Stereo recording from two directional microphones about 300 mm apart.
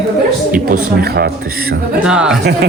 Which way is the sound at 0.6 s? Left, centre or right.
Right.